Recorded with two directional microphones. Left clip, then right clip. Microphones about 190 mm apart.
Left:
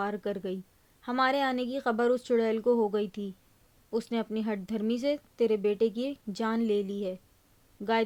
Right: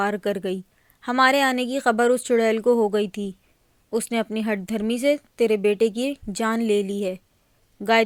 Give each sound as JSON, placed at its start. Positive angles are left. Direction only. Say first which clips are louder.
{"t": 0.0, "sound": "speech", "louder": "right 9 dB", "side_deg": -20}